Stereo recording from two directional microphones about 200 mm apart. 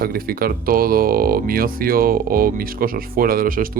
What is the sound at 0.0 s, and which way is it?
Speech, 50° right (ahead or behind).